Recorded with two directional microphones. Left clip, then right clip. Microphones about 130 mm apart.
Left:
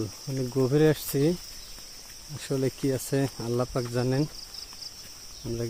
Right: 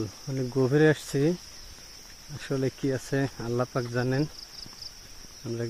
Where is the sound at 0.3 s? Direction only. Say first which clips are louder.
Even; 5° left (ahead or behind).